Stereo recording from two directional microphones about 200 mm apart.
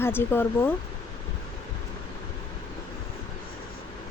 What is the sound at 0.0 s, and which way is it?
Speech, 10° left (ahead or behind).